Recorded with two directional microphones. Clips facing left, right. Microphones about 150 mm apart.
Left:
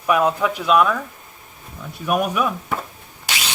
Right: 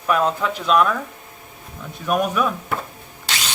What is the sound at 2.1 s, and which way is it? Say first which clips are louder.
Speech: even; 10° left (ahead or behind).